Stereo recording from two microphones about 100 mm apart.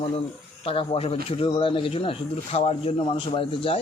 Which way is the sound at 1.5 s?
60° left (ahead or behind).